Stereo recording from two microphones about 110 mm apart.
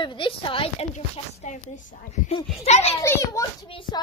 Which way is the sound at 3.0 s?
25° left (ahead or behind).